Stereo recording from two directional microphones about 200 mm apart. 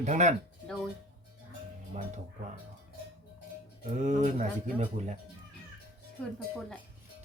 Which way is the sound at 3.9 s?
35° right (ahead or behind).